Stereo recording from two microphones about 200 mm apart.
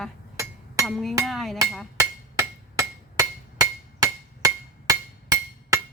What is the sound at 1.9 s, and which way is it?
Hammer, 15° right (ahead or behind).